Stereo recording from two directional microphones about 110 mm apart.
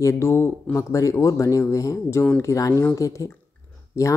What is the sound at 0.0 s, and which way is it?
Speech, 25° left (ahead or behind).